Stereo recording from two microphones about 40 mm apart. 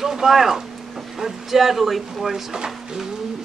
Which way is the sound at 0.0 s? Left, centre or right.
Centre.